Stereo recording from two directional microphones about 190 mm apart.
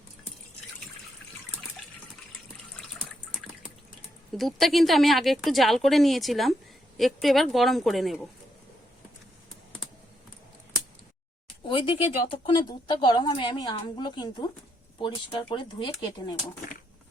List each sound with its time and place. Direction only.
2.9 s water: 5° right (ahead or behind)
4.4 s speech: centre (ahead or behind)
11.7 s speech: 30° left (ahead or behind)